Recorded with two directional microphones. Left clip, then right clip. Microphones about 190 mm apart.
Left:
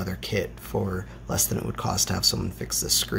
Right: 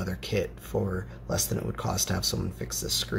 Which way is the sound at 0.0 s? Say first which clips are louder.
Left 2 dB; 10° left (ahead or behind).